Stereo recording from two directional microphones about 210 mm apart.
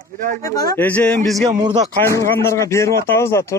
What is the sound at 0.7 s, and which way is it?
Speech, 5° left (ahead or behind).